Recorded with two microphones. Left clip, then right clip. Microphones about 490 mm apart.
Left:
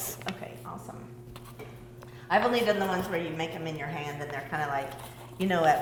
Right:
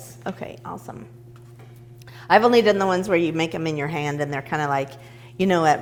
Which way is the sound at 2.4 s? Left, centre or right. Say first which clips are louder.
Right 9 dB; right.